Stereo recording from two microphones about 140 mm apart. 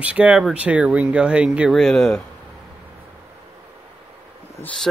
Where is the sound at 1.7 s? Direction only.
Centre (ahead or behind).